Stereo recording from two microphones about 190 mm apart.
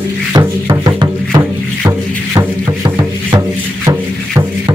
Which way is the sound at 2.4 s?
20° right (ahead or behind).